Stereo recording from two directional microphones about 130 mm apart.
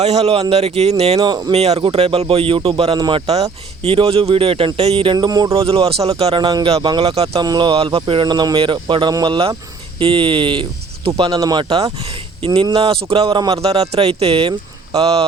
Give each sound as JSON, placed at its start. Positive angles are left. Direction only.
{"t": 0.0, "sound": "speech", "side_deg": -55}
{"t": 1.2, "sound": "speech", "side_deg": -35}
{"t": 1.5, "sound": "speech", "side_deg": -55}
{"t": 3.8, "sound": "speech", "side_deg": -50}
{"t": 5.5, "sound": "speech", "side_deg": -45}
{"t": 6.4, "sound": "speech", "side_deg": -35}
{"t": 7.0, "sound": "speech", "side_deg": -50}
{"t": 7.3, "sound": "speech", "side_deg": -30}
{"t": 7.7, "sound": "speech", "side_deg": -45}
{"t": 11.3, "sound": "speech", "side_deg": -30}
{"t": 11.7, "sound": "speech", "side_deg": -50}